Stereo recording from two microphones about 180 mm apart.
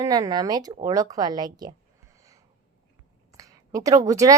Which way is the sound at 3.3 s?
20° right (ahead or behind).